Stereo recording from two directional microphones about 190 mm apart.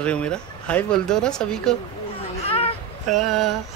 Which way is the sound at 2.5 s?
30° left (ahead or behind).